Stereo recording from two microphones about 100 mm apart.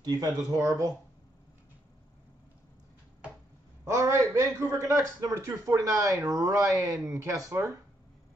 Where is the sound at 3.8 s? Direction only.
30° right (ahead or behind).